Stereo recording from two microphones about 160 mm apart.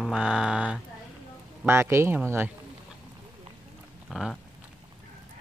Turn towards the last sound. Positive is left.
turn(degrees=0)  # may be behind; listen again after turning